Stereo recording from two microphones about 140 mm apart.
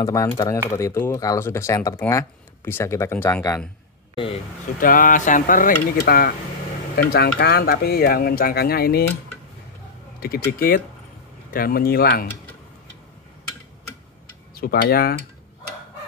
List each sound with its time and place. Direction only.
0.0 s speech: 25° left (ahead or behind)
4.7 s speech: 85° left
10.2 s speech: 90° left
14.5 s speech: 90° left